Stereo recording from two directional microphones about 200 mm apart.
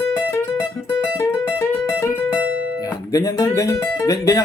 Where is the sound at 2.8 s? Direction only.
15° left (ahead or behind).